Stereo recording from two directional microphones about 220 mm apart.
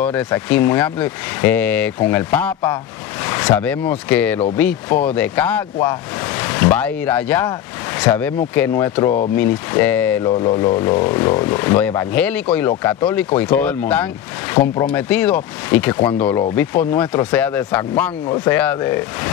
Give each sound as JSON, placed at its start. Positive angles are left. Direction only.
{"t": 0.0, "sound": "speech", "side_deg": 5}
{"t": 10.2, "sound": "a sound", "side_deg": 20}
{"t": 10.6, "sound": "speech", "side_deg": 15}